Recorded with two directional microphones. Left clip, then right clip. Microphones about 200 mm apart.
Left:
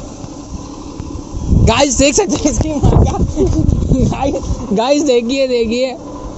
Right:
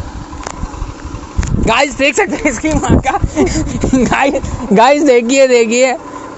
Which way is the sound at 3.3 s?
45° right (ahead or behind).